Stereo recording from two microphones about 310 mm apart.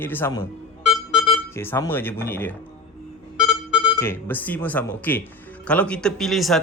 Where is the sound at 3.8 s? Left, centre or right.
Centre.